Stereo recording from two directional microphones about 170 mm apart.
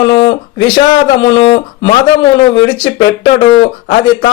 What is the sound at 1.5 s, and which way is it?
Speech, 35° left (ahead or behind).